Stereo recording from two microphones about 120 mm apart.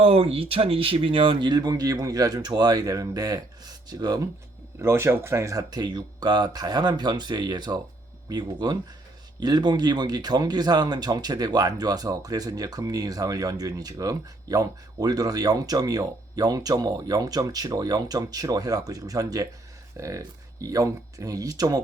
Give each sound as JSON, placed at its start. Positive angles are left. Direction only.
{"t": 0.0, "sound": "speech", "side_deg": -50}
{"t": 4.8, "sound": "speech", "side_deg": -20}